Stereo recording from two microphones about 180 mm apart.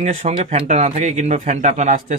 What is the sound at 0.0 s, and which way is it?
Speech, 40° right (ahead or behind).